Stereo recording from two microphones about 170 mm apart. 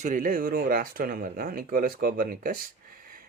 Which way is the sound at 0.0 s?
50° right (ahead or behind).